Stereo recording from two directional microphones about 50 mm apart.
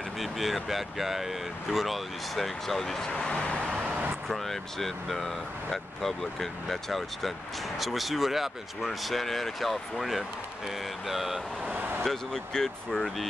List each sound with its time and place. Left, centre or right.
0.2 s speech: centre
3.3 s vehicle: centre
4.3 s speech: centre
12.0 s speech: centre